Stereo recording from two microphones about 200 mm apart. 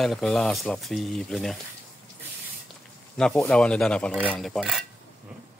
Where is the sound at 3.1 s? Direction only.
Centre (ahead or behind).